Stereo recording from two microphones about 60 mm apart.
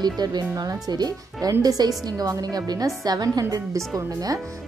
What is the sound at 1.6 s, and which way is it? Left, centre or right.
A woman's voice, right.